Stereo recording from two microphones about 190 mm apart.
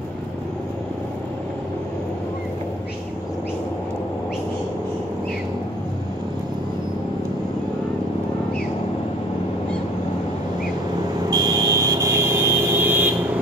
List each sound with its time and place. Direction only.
11.2 s vehicle: 20° right (ahead or behind)